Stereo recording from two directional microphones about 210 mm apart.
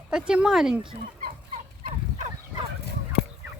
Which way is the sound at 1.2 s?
40° right (ahead or behind).